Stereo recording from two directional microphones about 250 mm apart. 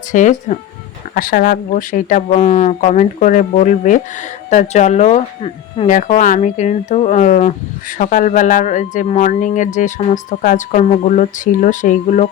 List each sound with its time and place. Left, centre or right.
0.1 s speech: left